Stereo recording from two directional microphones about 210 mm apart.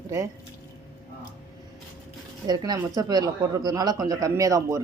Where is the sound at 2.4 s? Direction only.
20° right (ahead or behind).